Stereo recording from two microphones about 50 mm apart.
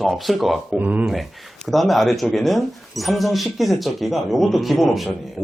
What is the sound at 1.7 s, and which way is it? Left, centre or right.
Speech, centre.